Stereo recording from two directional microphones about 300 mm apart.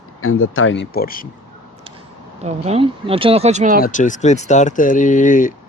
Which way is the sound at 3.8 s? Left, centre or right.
Left.